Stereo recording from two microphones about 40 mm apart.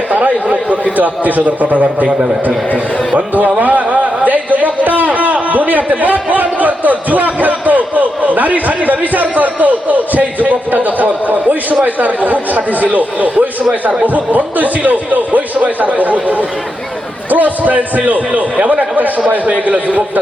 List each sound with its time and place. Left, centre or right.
0.9 s a man's voice: right
2.0 s a man's voice: right
3.2 s a man's voice: right